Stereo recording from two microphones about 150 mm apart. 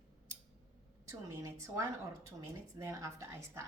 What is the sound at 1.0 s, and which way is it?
A woman's voice, 20° right (ahead or behind).